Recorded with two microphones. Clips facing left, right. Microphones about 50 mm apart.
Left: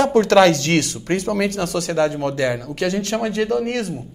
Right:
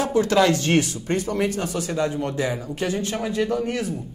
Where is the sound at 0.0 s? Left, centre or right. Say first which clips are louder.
Left 6 dB; left.